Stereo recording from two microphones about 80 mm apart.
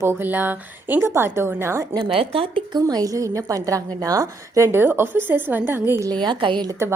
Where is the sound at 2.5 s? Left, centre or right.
Right.